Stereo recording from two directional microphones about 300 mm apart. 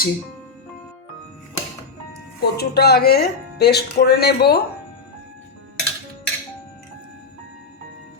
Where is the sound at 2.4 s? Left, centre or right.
Left.